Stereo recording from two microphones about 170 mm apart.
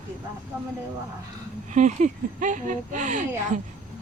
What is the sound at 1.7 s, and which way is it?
Speech, 45° right (ahead or behind).